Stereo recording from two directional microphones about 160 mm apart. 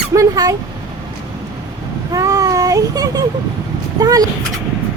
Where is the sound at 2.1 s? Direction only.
20° right (ahead or behind).